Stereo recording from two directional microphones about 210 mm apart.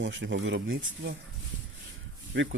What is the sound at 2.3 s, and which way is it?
Speech, 55° right (ahead or behind).